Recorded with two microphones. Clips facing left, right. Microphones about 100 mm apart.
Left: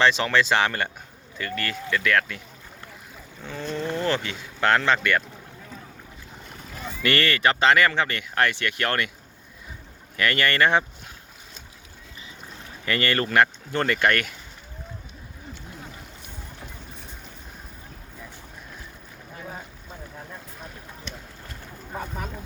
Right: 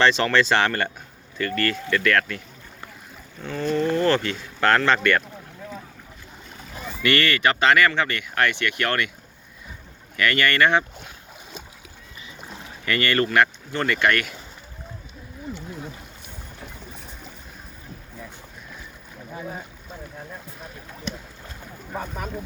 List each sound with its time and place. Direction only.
0.0 s speech: 10° left (ahead or behind)
3.4 s speech: 15° left (ahead or behind)
7.0 s speech: 35° left (ahead or behind)
10.2 s speech: 30° left (ahead or behind)
12.8 s speech: 30° left (ahead or behind)